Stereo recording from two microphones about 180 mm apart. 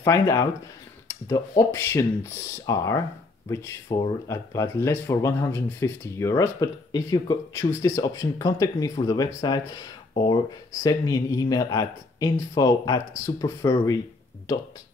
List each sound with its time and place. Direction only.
0.0 s speech: 15° left (ahead or behind)
1.7 s speech: 15° left (ahead or behind)